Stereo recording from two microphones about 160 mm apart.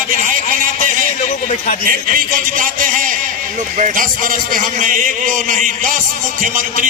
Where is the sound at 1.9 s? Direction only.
60° right (ahead or behind).